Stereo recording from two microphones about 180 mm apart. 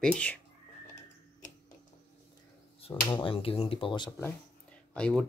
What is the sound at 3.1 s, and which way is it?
Speech, 25° left (ahead or behind).